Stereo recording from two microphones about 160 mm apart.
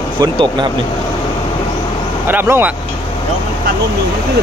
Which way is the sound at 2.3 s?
15° right (ahead or behind).